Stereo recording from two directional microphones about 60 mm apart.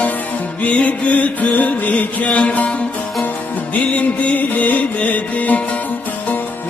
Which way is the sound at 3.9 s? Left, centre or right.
Left.